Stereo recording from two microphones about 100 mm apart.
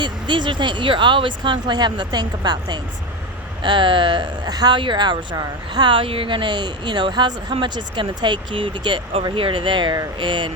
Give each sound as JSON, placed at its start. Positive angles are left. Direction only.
{"t": 0.0, "sound": "speech", "side_deg": -50}